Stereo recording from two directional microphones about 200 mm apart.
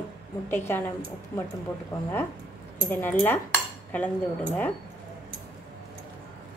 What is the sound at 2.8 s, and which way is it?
Speech, 10° left (ahead or behind).